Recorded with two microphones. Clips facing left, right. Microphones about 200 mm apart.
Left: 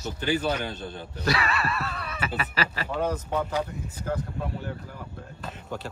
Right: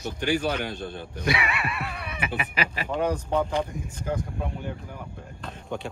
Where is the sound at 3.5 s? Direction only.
5° left (ahead or behind).